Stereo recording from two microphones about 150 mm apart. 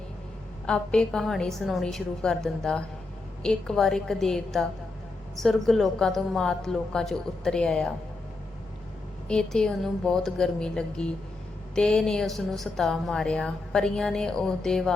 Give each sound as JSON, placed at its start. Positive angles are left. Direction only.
{"t": 0.7, "sound": "a woman's voice", "side_deg": 5}
{"t": 9.2, "sound": "a woman's voice", "side_deg": 5}